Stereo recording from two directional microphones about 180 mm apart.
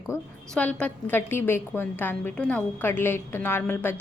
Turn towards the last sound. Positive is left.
turn(degrees=10)  # may be behind; listen again after turning